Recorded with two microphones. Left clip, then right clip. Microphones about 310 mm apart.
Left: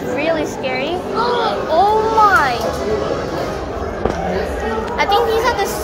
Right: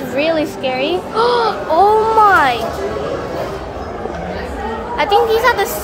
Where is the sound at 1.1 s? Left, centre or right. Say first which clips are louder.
Right 3 dB; right.